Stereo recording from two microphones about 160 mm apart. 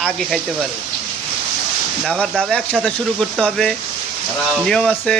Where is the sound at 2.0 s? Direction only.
5° left (ahead or behind).